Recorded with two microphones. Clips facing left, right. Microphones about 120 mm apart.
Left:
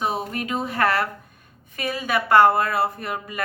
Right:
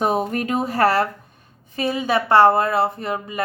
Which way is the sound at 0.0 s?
45° right (ahead or behind).